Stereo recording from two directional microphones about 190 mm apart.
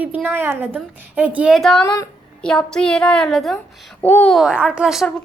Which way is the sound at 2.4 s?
5° left (ahead or behind).